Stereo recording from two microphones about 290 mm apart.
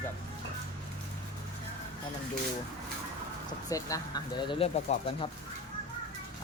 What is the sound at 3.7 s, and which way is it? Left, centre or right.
Speech, centre.